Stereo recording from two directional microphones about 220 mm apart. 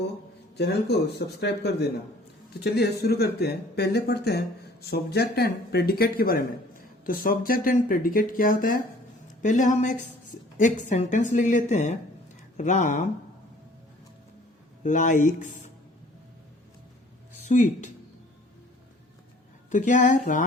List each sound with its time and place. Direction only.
0.5 s speech: 50° left (ahead or behind)
2.5 s a woman's voice: 45° left (ahead or behind)
14.8 s a woman's voice: 35° left (ahead or behind)
17.5 s a woman's voice: 35° left (ahead or behind)
19.7 s a woman's voice: 35° left (ahead or behind)